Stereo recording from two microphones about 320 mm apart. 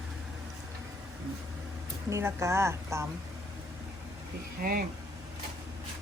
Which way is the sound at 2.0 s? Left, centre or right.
Centre.